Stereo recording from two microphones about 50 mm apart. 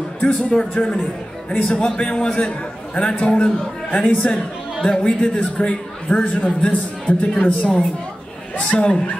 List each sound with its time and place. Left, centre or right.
0.2 s a man's voice: left
4.8 s a man's voice: centre
6.1 s a man's voice: left
7.3 s a man's voice: centre